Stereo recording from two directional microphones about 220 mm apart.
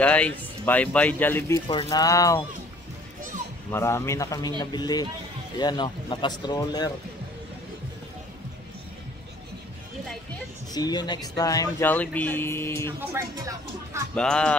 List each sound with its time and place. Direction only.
0.0 s speech: 5° left (ahead or behind)
1.7 s speech: 20° left (ahead or behind)
3.7 s speech: 10° left (ahead or behind)
10.7 s speech: 20° left (ahead or behind)
13.0 s speech: 10° right (ahead or behind)
14.1 s speech: 5° left (ahead or behind)